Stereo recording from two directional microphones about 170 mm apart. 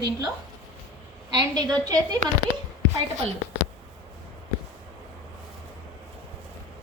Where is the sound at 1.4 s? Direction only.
25° right (ahead or behind).